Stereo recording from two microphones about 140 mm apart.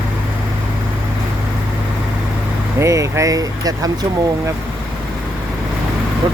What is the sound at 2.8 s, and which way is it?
Speech, 20° right (ahead or behind).